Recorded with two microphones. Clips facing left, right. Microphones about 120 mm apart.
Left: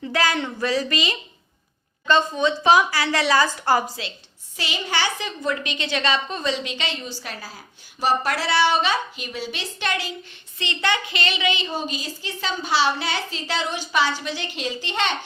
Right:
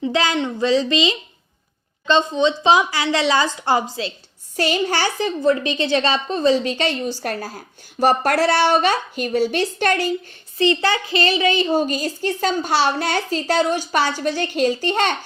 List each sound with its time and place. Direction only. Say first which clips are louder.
0.0 s a woman's voice: right 3 dB; 25° right (ahead or behind)
4.5 s a woman's voice: right 7 dB; 45° right (ahead or behind)
10.6 s a woman's voice: right 7 dB; 35° right (ahead or behind)